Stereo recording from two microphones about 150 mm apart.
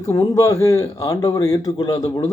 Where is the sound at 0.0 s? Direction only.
25° left (ahead or behind).